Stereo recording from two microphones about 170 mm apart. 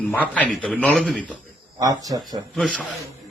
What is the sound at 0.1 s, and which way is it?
A man's voice, 10° left (ahead or behind).